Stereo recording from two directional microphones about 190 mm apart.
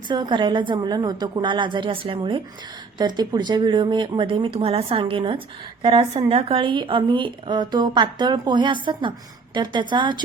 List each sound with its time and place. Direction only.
0.1 s speech: 25° right (ahead or behind)